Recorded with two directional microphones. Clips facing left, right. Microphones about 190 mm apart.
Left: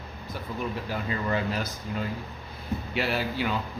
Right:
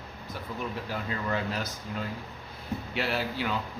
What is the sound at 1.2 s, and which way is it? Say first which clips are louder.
Speech: left 3 dB; 10° left (ahead or behind).